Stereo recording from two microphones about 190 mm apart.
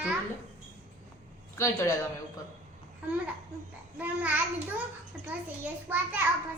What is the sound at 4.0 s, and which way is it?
A child's voice, 10° right (ahead or behind).